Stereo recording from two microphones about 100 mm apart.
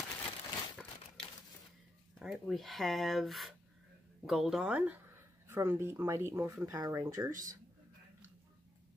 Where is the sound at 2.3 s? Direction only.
Centre (ahead or behind).